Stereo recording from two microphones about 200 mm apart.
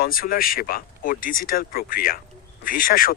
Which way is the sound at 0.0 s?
45° left (ahead or behind).